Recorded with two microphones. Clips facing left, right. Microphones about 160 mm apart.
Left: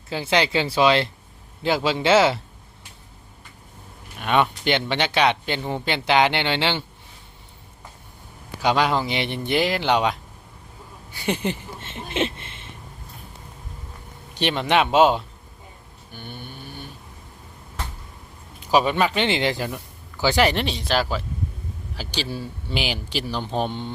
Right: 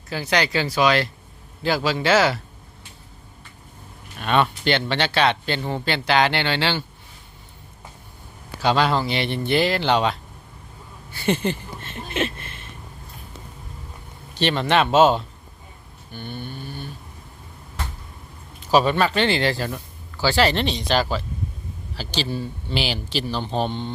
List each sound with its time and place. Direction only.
0.1 s speech: 25° left (ahead or behind)
4.2 s speech: 15° left (ahead or behind)
8.6 s speech: 15° left (ahead or behind)
11.1 s a sound: 15° left (ahead or behind)
14.3 s speech: 15° left (ahead or behind)
18.6 s speech: 15° left (ahead or behind)